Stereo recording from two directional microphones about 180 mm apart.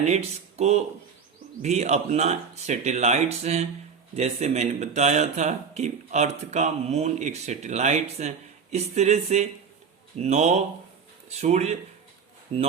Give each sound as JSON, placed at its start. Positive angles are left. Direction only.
{"t": 0.0, "sound": "speech", "side_deg": -40}